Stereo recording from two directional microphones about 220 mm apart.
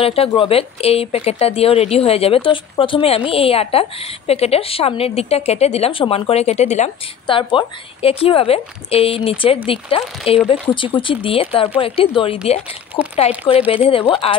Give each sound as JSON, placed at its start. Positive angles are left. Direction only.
{"t": 0.0, "sound": "a woman's voice", "side_deg": 25}